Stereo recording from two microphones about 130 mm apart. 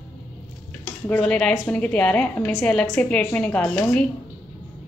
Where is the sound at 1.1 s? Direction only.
10° left (ahead or behind).